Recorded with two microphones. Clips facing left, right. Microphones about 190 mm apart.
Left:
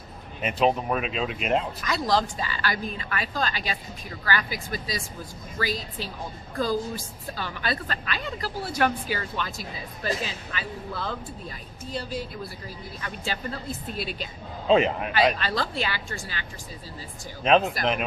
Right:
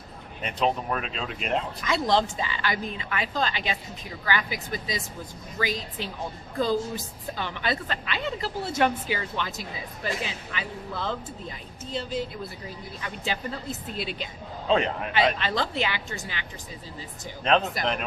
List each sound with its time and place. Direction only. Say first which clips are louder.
0.4 s speech: left 3 dB; 5° left (ahead or behind)
1.9 s a woman's voice: right 1 dB; 25° right (ahead or behind)
14.7 s speech: left 4 dB; 5° left (ahead or behind)
15.4 s a woman's voice: right 1 dB; 20° right (ahead or behind)
17.4 s speech: left 3 dB; 5° left (ahead or behind)